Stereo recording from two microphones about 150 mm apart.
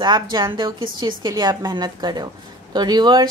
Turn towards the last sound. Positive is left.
turn(degrees=-30)  # may be behind; listen again after turning